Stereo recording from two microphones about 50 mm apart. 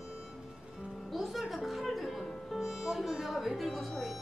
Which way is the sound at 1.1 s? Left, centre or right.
Centre.